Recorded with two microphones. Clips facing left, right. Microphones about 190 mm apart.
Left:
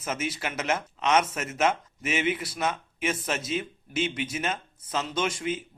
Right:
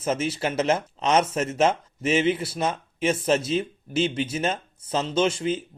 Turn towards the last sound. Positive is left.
turn(degrees=-30)  # may be behind; listen again after turning